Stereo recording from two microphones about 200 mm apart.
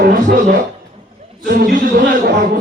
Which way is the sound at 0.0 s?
45° right (ahead or behind).